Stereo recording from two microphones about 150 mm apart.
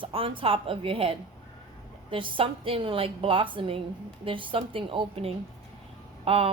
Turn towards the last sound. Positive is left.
turn(degrees=-40)  # may be behind; listen again after turning